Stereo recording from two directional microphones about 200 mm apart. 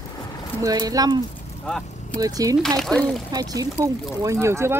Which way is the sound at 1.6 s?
5° left (ahead or behind).